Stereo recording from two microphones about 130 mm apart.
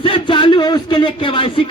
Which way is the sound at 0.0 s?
40° left (ahead or behind).